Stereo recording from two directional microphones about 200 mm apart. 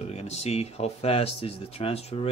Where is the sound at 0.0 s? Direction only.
35° left (ahead or behind).